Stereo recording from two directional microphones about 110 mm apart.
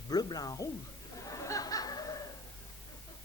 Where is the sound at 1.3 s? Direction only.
30° left (ahead or behind).